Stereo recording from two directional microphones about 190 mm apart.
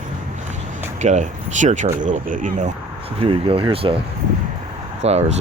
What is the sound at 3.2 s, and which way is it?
Speech, 30° right (ahead or behind).